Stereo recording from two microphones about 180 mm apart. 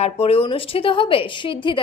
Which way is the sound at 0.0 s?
35° left (ahead or behind).